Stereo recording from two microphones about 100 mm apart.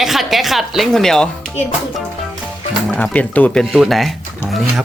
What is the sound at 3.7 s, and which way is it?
Speech, centre (ahead or behind).